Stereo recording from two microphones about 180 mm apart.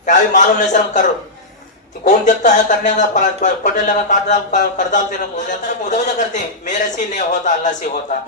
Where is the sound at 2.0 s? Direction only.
45° left (ahead or behind).